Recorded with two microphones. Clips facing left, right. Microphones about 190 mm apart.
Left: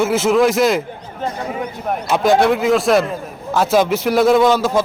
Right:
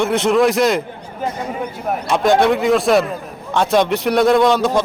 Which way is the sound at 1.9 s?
Centre (ahead or behind).